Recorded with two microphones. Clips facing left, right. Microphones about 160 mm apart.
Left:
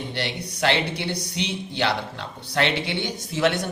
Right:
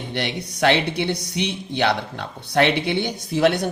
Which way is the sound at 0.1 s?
55° right (ahead or behind).